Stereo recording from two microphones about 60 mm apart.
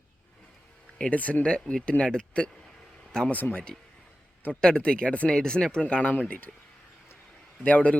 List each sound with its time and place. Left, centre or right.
0.9 s speech: centre
3.2 s speech: left
4.6 s speech: centre
7.6 s speech: left